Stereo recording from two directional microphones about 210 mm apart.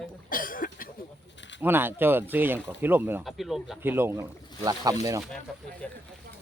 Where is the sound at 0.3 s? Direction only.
40° left (ahead or behind).